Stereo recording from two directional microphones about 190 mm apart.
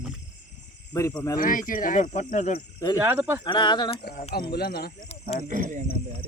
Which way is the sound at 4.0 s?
55° left (ahead or behind).